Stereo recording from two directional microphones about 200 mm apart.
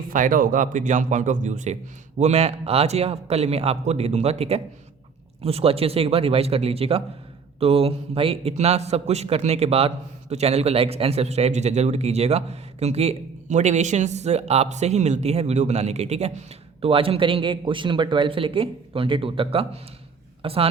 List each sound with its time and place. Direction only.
0.1 s a man's voice: 45° right (ahead or behind)